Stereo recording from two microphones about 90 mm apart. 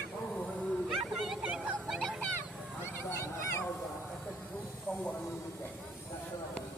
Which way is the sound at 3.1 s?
30° left (ahead or behind).